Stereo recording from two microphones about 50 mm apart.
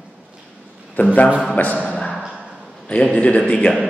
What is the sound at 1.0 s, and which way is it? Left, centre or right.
Speech, left.